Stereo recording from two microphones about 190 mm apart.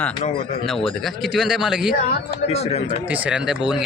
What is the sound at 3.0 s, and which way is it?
Speech, 5° right (ahead or behind).